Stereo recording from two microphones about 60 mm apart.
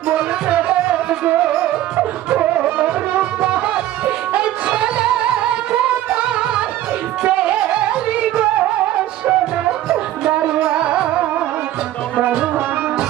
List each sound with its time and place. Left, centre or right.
0.4 s music: right
9.2 s music: centre